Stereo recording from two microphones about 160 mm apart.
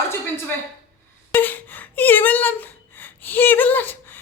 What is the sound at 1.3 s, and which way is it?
A woman's voice, 10° left (ahead or behind).